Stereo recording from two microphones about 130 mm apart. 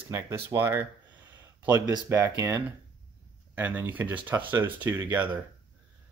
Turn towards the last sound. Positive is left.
turn(degrees=-15)  # may be behind; listen again after turning